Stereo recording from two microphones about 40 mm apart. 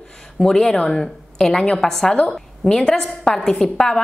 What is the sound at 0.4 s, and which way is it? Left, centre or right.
A woman's voice, centre.